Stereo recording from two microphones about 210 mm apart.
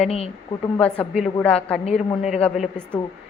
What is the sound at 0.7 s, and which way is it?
A woman's voice, 5° left (ahead or behind).